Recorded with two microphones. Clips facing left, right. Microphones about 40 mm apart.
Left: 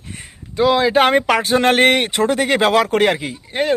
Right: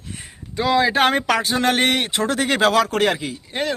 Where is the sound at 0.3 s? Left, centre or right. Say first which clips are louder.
Left 5 dB; centre.